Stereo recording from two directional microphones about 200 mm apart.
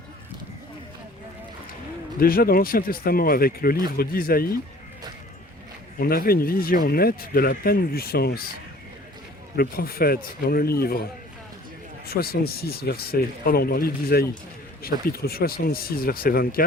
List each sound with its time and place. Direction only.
2.1 s speech: 45° left (ahead or behind)
6.0 s speech: 50° left (ahead or behind)
9.6 s speech: 50° left (ahead or behind)
12.0 s speech: 50° left (ahead or behind)